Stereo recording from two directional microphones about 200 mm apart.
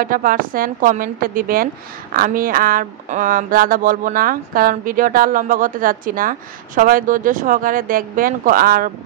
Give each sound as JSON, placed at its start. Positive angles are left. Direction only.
{"t": 0.0, "sound": "speech", "side_deg": -45}